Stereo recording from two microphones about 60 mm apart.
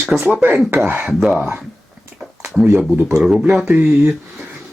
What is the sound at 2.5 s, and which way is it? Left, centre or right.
Speech, centre.